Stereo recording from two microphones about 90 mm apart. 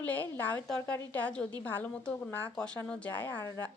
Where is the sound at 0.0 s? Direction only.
20° left (ahead or behind).